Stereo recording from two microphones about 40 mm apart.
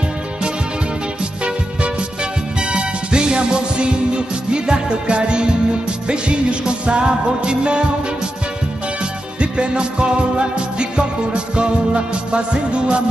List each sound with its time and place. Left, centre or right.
1.4 s music: right
9.4 s music: right